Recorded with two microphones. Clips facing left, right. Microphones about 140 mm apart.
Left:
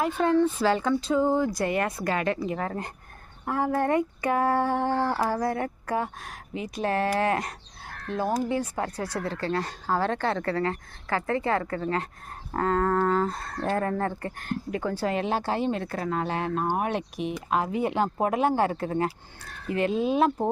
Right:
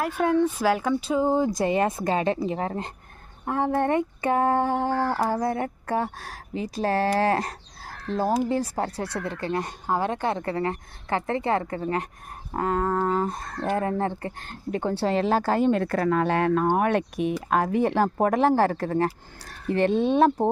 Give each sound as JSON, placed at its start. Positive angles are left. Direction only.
{"t": 0.0, "sound": "speech", "side_deg": -10}
{"t": 19.9, "sound": "speech", "side_deg": 5}
{"t": 20.1, "sound": "speech", "side_deg": -30}